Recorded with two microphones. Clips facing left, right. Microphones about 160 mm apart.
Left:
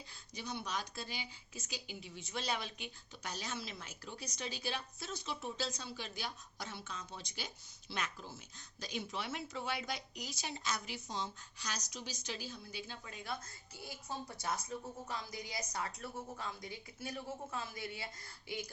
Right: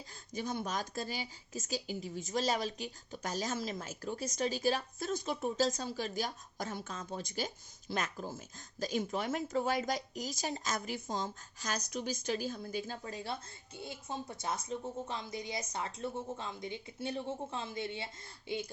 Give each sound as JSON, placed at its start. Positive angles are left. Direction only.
{"t": 0.1, "sound": "speech", "side_deg": -45}